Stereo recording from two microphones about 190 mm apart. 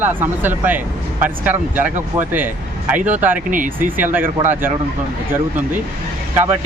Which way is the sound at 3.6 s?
45° right (ahead or behind).